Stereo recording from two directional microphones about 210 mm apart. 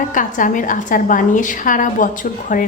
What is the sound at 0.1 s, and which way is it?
A woman's voice, 40° left (ahead or behind).